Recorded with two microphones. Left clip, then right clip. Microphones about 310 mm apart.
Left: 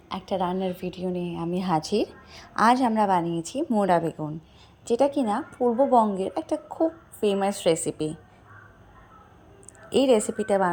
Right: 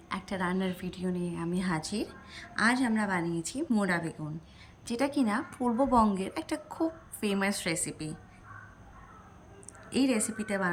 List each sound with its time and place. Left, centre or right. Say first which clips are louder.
0.1 s a sound: left 6 dB; centre
0.4 s a woman's voice: left 5 dB; centre
5.5 s a woman's voice: left 8 dB; centre
5.9 s a woman's voice: left 6 dB; centre
9.9 s a woman's voice: left 9 dB; centre